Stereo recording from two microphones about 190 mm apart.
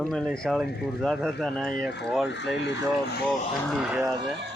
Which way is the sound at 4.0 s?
20° right (ahead or behind).